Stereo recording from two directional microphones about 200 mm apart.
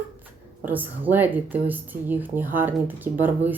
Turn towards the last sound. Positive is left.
turn(degrees=-10)  # may be behind; listen again after turning